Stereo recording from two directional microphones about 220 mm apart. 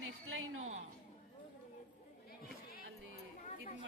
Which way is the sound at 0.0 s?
65° right (ahead or behind).